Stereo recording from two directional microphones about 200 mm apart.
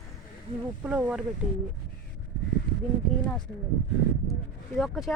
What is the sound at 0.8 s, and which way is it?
Speech, 5° right (ahead or behind).